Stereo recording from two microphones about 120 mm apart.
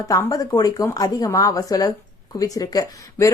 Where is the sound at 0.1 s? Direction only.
30° left (ahead or behind).